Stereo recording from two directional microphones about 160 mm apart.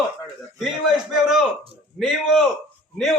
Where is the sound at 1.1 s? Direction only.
5° right (ahead or behind).